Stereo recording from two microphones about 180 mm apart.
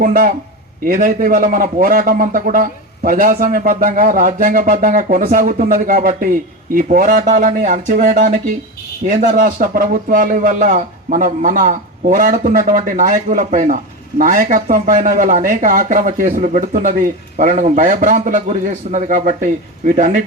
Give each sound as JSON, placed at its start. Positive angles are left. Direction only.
{"t": 0.0, "sound": "speech", "side_deg": -50}